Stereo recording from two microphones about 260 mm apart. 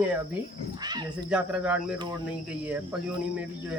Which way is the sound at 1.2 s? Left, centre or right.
Centre.